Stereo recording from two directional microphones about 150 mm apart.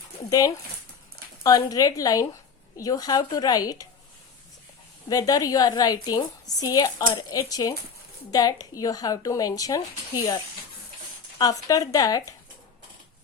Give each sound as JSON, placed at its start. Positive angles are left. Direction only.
{"t": 0.3, "sound": "a woman's voice", "side_deg": 25}
{"t": 5.0, "sound": "a woman's voice", "side_deg": 25}
{"t": 11.3, "sound": "a woman's voice", "side_deg": 25}